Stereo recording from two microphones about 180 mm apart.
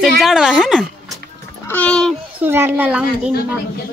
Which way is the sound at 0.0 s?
Centre (ahead or behind).